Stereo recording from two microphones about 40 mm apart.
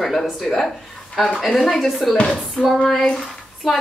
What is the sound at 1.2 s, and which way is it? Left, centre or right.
Speech, centre.